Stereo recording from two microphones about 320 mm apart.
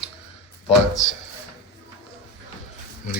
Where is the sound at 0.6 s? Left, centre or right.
Left.